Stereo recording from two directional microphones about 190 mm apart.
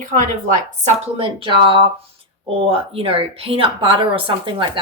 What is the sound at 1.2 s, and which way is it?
Speech, 25° right (ahead or behind).